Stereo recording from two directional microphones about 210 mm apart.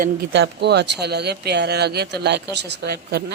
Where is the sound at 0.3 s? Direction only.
55° right (ahead or behind).